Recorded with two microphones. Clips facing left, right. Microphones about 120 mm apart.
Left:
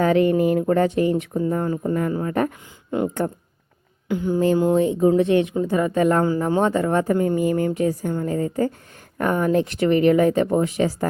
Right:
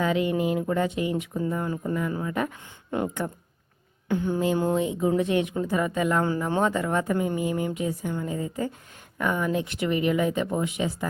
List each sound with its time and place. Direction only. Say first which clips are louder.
0.0 s a woman's voice: left 7 dB; 45° left (ahead or behind)
4.2 s speech: left 6 dB; 20° right (ahead or behind)
4.8 s speech: left 7 dB; 35° left (ahead or behind)
5.9 s speech: left 6 dB; 40° left (ahead or behind)
6.6 s speech: left 4 dB; 30° left (ahead or behind)
7.3 s a woman's voice: left 7 dB; 45° left (ahead or behind)